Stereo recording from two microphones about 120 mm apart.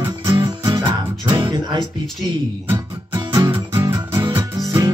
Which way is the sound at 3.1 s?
35° right (ahead or behind).